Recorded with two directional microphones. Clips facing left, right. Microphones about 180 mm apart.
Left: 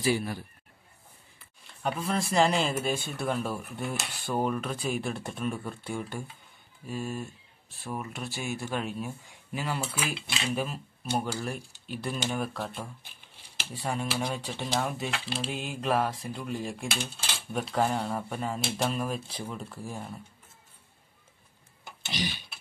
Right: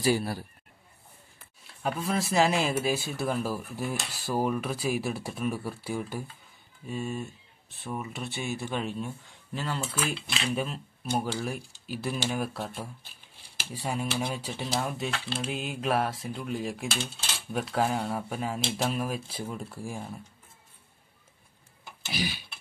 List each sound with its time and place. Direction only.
0.0 s a man's voice: 40° right (ahead or behind)
1.7 s speech: 5° right (ahead or behind)
22.1 s tick-tock: 5° right (ahead or behind)